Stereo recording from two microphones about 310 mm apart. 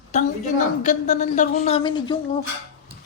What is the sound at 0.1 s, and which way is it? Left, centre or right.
A woman's voice, left.